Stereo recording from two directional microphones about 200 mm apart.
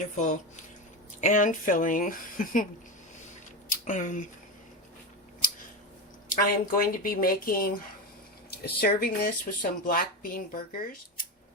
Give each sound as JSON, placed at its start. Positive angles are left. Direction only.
{"t": 0.0, "sound": "speech", "side_deg": 40}
{"t": 3.7, "sound": "speech", "side_deg": 40}
{"t": 6.2, "sound": "speech", "side_deg": 45}